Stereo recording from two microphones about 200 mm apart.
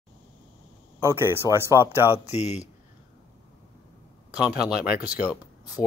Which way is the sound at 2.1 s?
35° left (ahead or behind).